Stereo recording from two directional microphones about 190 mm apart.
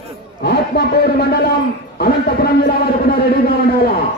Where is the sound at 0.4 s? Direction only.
55° left (ahead or behind).